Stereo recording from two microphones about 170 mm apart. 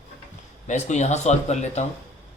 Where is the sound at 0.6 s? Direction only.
45° left (ahead or behind).